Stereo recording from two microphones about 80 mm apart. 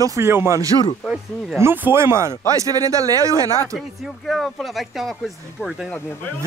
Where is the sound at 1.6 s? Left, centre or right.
Right.